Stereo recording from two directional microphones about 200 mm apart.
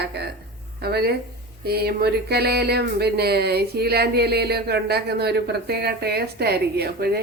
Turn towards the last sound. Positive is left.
turn(degrees=-50)  # may be behind; listen again after turning